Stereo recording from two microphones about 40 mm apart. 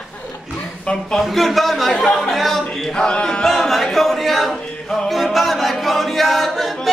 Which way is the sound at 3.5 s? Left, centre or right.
Centre.